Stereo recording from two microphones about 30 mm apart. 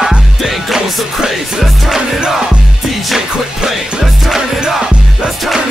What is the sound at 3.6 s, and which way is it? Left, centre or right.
Music, centre.